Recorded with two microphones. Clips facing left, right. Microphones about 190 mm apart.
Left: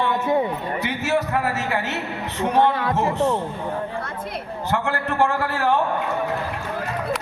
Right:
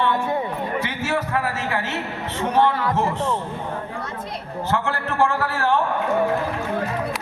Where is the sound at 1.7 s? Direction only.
15° left (ahead or behind).